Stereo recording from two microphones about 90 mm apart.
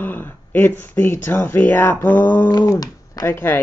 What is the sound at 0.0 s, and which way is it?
Speech, 20° left (ahead or behind).